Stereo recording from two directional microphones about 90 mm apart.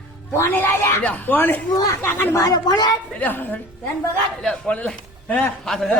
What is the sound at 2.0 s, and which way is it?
Speech, 25° left (ahead or behind).